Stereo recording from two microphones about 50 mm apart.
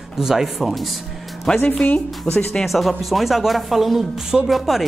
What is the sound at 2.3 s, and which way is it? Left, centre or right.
Speech, left.